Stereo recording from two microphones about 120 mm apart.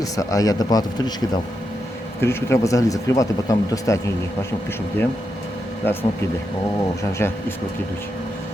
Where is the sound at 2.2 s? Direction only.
20° left (ahead or behind).